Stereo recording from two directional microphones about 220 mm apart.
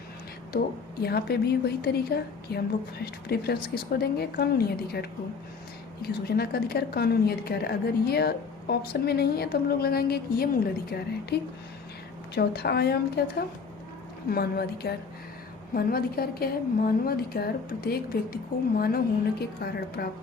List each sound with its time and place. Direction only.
1.0 s a woman's voice: 45° left (ahead or behind)